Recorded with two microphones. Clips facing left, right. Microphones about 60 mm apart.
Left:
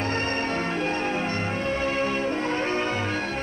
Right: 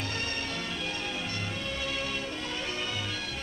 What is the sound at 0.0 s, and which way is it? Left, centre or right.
Music, left.